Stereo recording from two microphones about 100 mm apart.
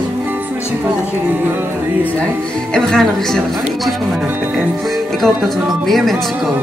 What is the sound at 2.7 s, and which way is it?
Music, 5° left (ahead or behind).